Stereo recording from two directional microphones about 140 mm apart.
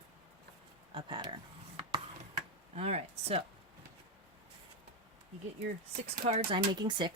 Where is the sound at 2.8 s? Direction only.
45° right (ahead or behind).